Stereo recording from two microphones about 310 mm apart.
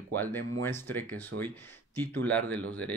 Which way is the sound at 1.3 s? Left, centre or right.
Right.